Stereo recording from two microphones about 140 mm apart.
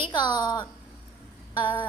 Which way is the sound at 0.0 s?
30° left (ahead or behind).